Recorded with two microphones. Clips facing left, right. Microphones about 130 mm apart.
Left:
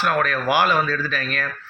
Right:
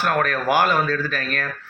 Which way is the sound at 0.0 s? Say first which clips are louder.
Even; 45° right (ahead or behind).